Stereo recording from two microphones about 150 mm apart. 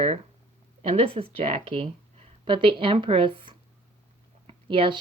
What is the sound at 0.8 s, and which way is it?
A woman's voice, 40° right (ahead or behind).